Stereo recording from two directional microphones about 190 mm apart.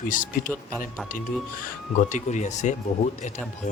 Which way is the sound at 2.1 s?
40° left (ahead or behind).